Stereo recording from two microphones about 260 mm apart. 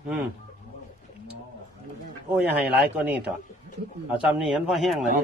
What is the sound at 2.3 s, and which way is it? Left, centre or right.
Speech, centre.